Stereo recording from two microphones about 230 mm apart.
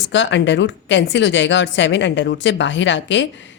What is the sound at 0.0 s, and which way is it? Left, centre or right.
Speech, left.